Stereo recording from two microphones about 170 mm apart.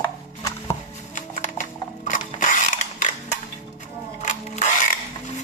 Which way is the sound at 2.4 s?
45° left (ahead or behind).